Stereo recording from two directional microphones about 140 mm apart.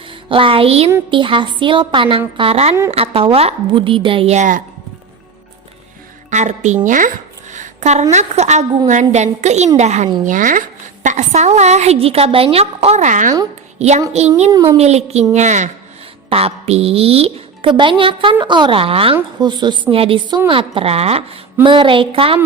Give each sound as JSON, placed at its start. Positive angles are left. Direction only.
{"t": 0.1, "sound": "a woman's voice", "side_deg": -40}
{"t": 4.4, "sound": "speech", "side_deg": -70}
{"t": 6.3, "sound": "speech", "side_deg": -55}
{"t": 6.8, "sound": "speech", "side_deg": -70}
{"t": 7.5, "sound": "a sound", "side_deg": -60}
{"t": 8.1, "sound": "speech", "side_deg": -55}
{"t": 10.2, "sound": "speech", "side_deg": -70}
{"t": 11.0, "sound": "a woman's voice", "side_deg": -60}
{"t": 13.7, "sound": "a woman's voice", "side_deg": -50}
{"t": 14.5, "sound": "speech", "side_deg": -20}
{"t": 14.8, "sound": "a woman's voice", "side_deg": -50}
{"t": 16.3, "sound": "a woman's voice", "side_deg": -45}